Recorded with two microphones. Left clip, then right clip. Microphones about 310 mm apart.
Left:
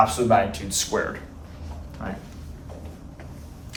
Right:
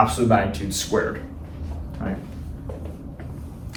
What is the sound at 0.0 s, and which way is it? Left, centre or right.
Speech, centre.